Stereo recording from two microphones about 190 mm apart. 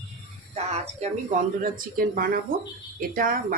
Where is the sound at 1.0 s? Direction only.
40° right (ahead or behind).